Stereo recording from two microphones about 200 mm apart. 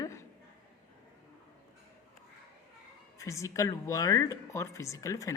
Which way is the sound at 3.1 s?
15° left (ahead or behind).